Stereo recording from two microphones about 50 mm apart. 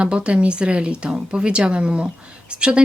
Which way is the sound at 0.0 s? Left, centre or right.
Right.